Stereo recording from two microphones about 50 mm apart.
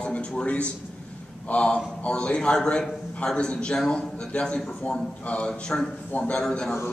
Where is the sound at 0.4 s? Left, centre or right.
Left.